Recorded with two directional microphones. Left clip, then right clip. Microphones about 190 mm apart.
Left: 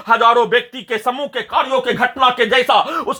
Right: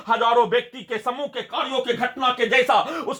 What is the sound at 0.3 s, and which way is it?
Speech, 25° left (ahead or behind).